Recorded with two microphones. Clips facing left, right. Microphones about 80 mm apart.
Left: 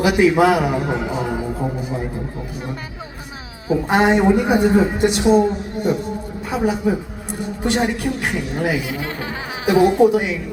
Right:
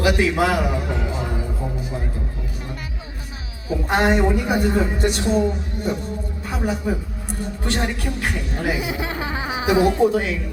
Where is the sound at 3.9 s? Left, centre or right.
Centre.